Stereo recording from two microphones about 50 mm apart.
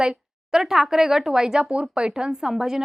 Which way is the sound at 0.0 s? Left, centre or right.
Centre.